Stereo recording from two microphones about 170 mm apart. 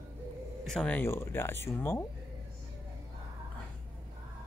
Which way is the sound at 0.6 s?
5° left (ahead or behind).